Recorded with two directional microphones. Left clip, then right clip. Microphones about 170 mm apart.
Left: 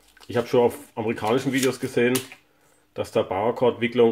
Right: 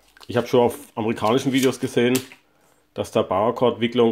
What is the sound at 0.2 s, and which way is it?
Speech, 35° right (ahead or behind).